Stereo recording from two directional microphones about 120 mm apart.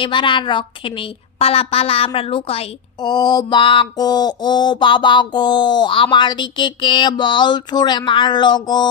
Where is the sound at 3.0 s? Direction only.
35° left (ahead or behind).